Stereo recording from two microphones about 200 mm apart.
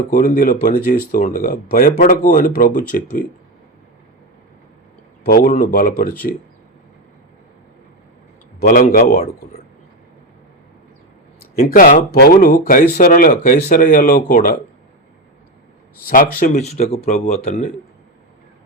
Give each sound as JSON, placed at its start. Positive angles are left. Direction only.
{"t": 0.1, "sound": "speech", "side_deg": 45}
{"t": 5.2, "sound": "speech", "side_deg": 45}
{"t": 8.5, "sound": "speech", "side_deg": 45}
{"t": 11.6, "sound": "speech", "side_deg": 45}
{"t": 16.0, "sound": "speech", "side_deg": 45}